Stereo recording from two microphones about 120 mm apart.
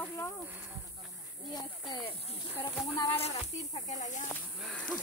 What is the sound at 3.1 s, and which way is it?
Speech, 60° left (ahead or behind).